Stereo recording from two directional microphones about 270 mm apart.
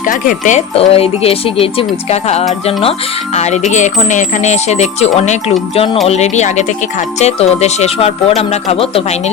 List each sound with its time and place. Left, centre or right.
0.1 s speech: left